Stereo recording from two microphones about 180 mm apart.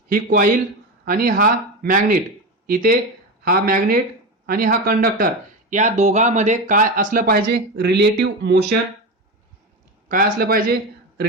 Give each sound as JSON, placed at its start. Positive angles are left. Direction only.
{"t": 0.1, "sound": "speech", "side_deg": -55}
{"t": 5.7, "sound": "speech", "side_deg": -40}
{"t": 10.1, "sound": "speech", "side_deg": -50}